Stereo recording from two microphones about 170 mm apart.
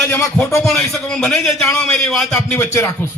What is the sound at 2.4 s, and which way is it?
Speech, 15° left (ahead or behind).